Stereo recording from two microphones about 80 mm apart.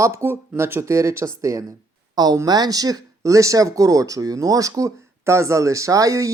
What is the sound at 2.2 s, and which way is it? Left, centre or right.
Speech, right.